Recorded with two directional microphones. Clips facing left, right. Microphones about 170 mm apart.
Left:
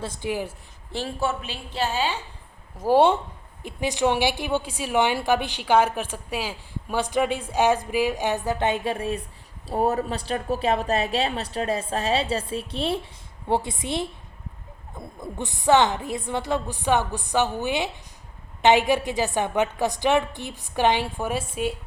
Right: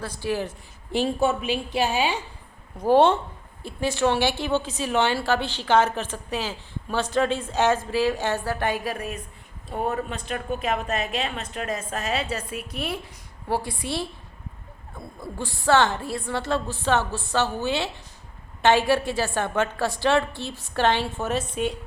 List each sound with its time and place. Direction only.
0.0 s a woman's voice: 20° left (ahead or behind)
0.9 s a woman's voice: 15° right (ahead or behind)
2.7 s a woman's voice: 10° left (ahead or behind)